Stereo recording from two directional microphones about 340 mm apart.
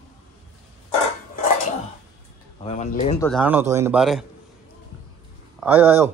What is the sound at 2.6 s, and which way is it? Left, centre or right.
Speech, centre.